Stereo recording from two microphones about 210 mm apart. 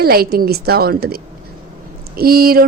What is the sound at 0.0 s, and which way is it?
A woman's voice, 45° right (ahead or behind).